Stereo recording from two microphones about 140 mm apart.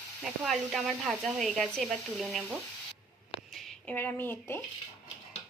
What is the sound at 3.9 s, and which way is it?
Speech, 15° left (ahead or behind).